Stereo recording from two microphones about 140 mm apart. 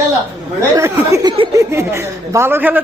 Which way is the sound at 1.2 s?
30° right (ahead or behind).